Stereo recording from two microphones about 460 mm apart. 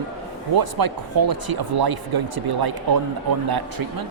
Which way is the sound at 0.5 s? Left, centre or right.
Right.